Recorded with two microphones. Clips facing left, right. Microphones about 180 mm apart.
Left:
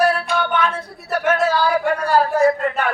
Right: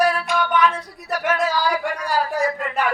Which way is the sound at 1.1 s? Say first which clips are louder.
Left 4 dB; 60° left (ahead or behind).